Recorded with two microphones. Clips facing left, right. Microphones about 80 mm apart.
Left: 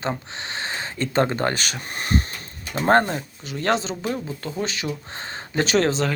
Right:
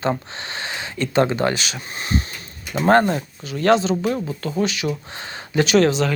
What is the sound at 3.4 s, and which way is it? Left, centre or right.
Speech, left.